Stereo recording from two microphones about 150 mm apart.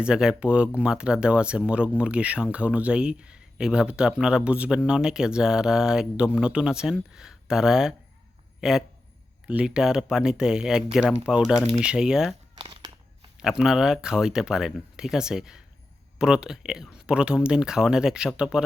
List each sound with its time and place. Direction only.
0.0 s speech: 5° right (ahead or behind)
12.5 s a sound: 40° right (ahead or behind)
13.3 s speech: 5° right (ahead or behind)